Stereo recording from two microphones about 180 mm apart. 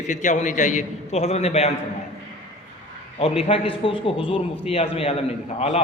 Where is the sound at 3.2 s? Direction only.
30° left (ahead or behind).